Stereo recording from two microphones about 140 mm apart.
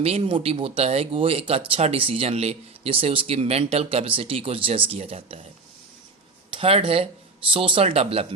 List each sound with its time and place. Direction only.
0.0 s speech: 45° right (ahead or behind)
6.5 s speech: 40° right (ahead or behind)